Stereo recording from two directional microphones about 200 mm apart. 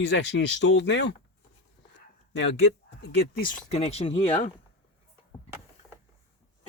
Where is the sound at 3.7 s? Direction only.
30° left (ahead or behind).